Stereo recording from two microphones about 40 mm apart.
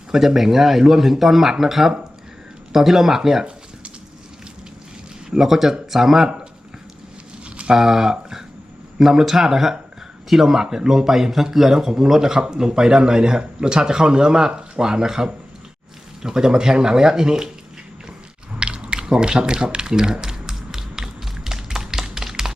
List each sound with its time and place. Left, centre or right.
0.1 s speech: centre
5.3 s speech: centre
7.7 s speech: centre
18.6 s squish: right
21.8 s tap: centre